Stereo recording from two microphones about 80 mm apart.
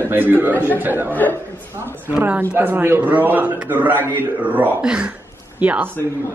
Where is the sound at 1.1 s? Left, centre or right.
Left.